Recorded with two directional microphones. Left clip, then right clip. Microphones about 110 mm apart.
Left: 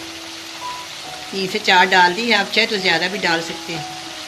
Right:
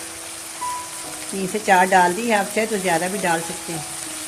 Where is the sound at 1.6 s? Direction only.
75° right (ahead or behind); by 3.4 s 90° right.